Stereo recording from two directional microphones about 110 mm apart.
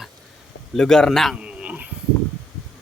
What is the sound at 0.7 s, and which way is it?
Speech, 5° left (ahead or behind).